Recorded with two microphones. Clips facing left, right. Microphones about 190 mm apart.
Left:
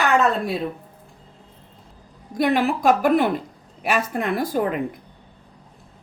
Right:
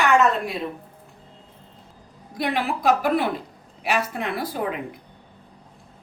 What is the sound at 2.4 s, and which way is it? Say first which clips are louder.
A woman's voice: left 5 dB; 45° left (ahead or behind).